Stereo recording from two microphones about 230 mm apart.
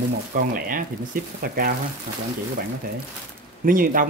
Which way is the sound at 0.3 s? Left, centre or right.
Right.